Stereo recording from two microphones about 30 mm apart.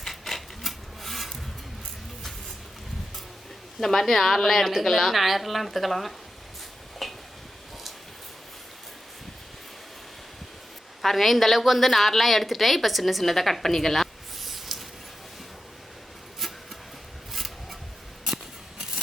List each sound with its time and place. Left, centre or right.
0.1 s rub: centre
3.8 s a woman's voice: centre
7.0 s a sound: centre
11.0 s a woman's voice: centre
16.4 s music: centre
17.3 s a sound: centre